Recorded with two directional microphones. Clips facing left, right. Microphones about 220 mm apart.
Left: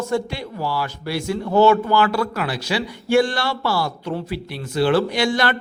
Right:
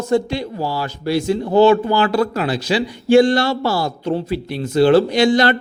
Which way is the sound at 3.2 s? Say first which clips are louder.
Right 7 dB; 40° right (ahead or behind).